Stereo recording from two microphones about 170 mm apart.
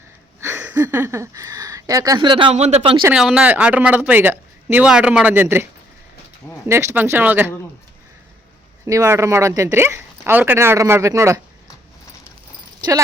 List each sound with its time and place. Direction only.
0.3 s speech: 15° right (ahead or behind); by 3.0 s 35° right (ahead or behind)
3.0 s speech: 5° right (ahead or behind)
6.7 s speech: 15° right (ahead or behind)
8.9 s speech: 15° right (ahead or behind)